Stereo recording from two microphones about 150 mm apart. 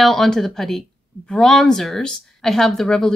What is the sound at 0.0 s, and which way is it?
Speech, centre (ahead or behind).